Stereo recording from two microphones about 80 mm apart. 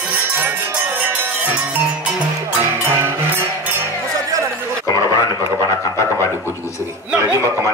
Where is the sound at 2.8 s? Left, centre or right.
Right.